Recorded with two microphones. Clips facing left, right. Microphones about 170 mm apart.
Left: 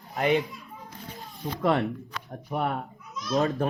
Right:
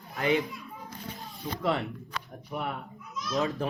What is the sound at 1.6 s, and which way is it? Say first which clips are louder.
Speech: left 5 dB; 45° left (ahead or behind).